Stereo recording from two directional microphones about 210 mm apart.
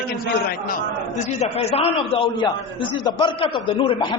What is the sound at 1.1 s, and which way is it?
A man's voice, 30° left (ahead or behind).